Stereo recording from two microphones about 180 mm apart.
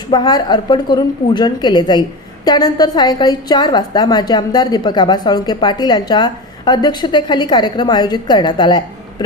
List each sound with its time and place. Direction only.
0.1 s a woman's voice: 20° left (ahead or behind)